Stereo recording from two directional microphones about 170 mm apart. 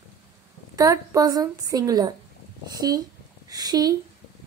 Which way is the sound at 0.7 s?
20° right (ahead or behind).